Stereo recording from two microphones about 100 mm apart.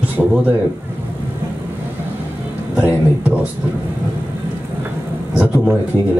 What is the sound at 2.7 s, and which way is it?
Speech, 15° right (ahead or behind).